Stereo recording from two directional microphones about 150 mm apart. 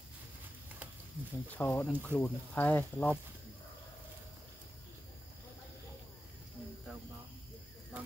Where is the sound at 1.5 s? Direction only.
10° left (ahead or behind).